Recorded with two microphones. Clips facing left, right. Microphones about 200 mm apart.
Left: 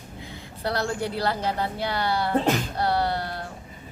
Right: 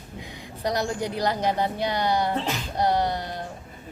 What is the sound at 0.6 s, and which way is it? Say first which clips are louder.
Speech: right 1 dB; 15° right (ahead or behind).